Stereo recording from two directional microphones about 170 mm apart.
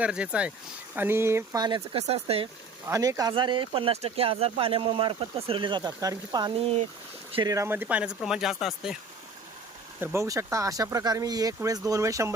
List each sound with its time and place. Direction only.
0.0 s speech: 5° right (ahead or behind); by 2.5 s 35° right (ahead or behind)
2.8 s speech: 20° right (ahead or behind); by 9.0 s centre (ahead or behind)
10.0 s speech: 15° right (ahead or behind)